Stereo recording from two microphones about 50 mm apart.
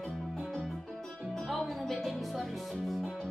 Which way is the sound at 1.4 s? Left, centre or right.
Centre.